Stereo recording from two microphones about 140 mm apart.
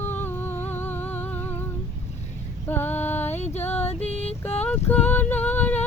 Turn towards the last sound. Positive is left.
turn(degrees=10)  # may be behind; listen again after turning